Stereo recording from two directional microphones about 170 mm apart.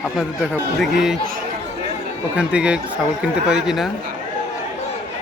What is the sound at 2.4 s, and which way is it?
Speech, 5° right (ahead or behind).